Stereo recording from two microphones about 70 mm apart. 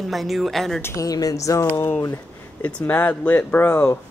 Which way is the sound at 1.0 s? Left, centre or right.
Left.